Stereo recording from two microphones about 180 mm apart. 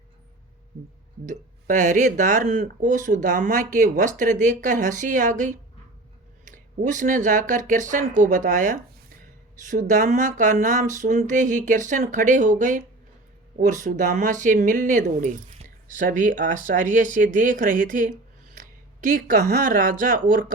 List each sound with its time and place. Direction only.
1.2 s speech: 45° right (ahead or behind)